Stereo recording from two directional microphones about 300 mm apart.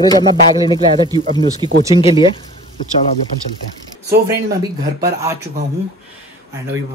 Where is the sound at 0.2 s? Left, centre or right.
Centre.